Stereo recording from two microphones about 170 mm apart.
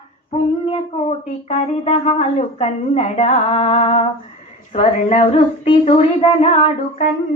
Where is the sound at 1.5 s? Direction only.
40° left (ahead or behind).